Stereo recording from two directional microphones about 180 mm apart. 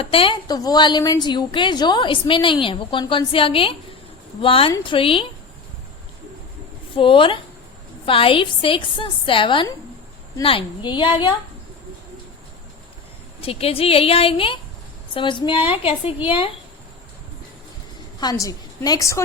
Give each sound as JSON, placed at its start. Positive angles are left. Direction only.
{"t": 0.0, "sound": "a woman's voice", "side_deg": 30}
{"t": 6.9, "sound": "a woman's voice", "side_deg": 30}
{"t": 13.4, "sound": "a woman's voice", "side_deg": 35}
{"t": 18.2, "sound": "a woman's voice", "side_deg": 20}